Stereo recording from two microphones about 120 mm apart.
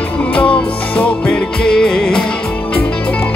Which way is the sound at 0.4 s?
10° left (ahead or behind).